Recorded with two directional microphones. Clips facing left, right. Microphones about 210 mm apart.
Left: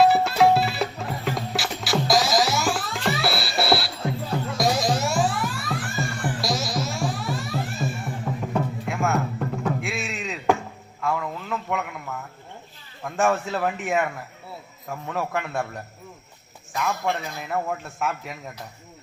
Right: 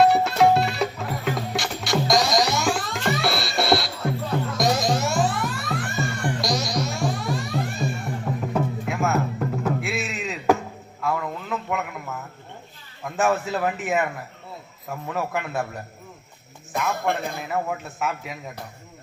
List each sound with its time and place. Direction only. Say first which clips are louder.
0.0 s music: even; centre (ahead or behind)
11.0 s a sound: even; centre (ahead or behind)
13.1 s a man's voice: even; centre (ahead or behind)
16.9 s a man's voice: right 3 dB; 55° right (ahead or behind)
17.5 s a man's voice: left 2 dB; centre (ahead or behind)